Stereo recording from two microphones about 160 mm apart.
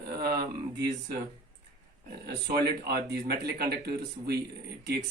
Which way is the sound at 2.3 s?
85° right.